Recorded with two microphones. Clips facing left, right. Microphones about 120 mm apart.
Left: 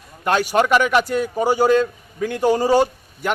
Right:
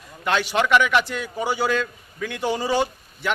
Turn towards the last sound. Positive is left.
turn(degrees=45)  # may be behind; listen again after turning